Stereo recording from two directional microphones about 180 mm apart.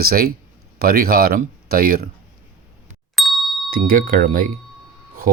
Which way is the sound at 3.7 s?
50° right (ahead or behind).